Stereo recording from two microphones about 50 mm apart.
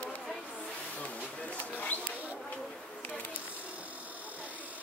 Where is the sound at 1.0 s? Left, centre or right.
Left.